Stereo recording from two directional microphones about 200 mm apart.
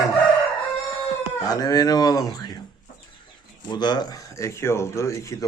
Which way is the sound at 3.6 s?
20° left (ahead or behind).